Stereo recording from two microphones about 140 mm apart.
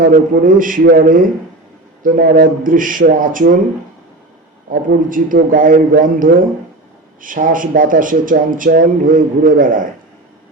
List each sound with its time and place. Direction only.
0.0 s speech: 75° right (ahead or behind)
2.0 s speech: 90° right
4.7 s speech: 75° right (ahead or behind)